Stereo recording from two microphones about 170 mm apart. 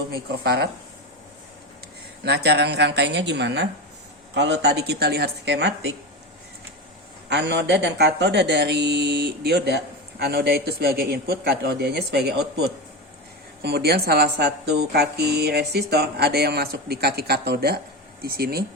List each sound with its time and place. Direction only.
0.1 s speech: 70° right (ahead or behind)
2.2 s a woman's voice: 85° right
7.3 s speech: 85° right; by 18.6 s 65° right (ahead or behind)